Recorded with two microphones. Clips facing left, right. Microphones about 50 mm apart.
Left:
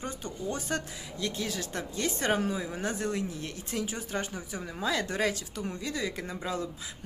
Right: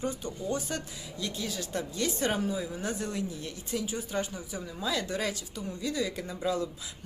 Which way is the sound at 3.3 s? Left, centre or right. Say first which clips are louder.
Right 1 dB; left.